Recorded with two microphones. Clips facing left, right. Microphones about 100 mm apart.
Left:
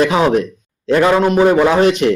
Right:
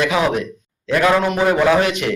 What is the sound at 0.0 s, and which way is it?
A man's voice, 30° left (ahead or behind).